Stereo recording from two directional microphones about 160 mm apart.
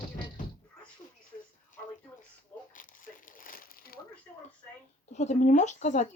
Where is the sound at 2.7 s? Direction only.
55° left (ahead or behind).